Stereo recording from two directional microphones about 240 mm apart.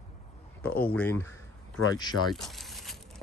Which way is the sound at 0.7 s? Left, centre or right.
Centre.